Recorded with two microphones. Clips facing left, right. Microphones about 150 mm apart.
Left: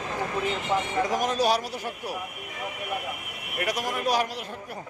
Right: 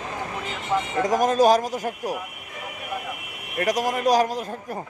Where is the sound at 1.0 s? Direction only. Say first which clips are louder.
Right 9 dB; 45° right (ahead or behind).